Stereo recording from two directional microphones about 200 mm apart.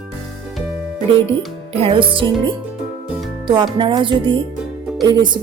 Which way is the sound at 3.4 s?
25° right (ahead or behind).